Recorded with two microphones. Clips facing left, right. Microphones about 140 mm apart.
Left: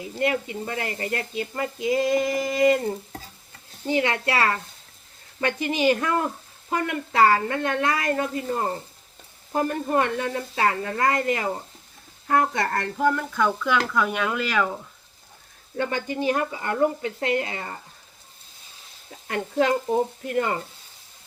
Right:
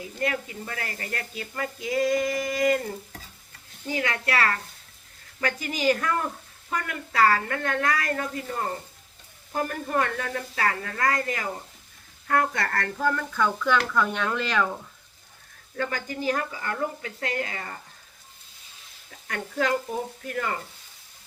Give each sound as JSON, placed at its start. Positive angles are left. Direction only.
{"t": 0.0, "sound": "speech", "side_deg": 25}
{"t": 15.7, "sound": "speech", "side_deg": 25}
{"t": 19.1, "sound": "speech", "side_deg": 25}